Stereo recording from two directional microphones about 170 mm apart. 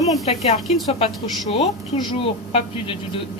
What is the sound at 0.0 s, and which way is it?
A woman's voice, 40° left (ahead or behind).